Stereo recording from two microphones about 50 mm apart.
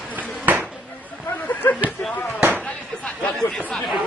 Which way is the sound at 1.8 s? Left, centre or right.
Right.